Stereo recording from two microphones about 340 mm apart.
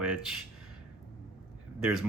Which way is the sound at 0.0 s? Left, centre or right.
Centre.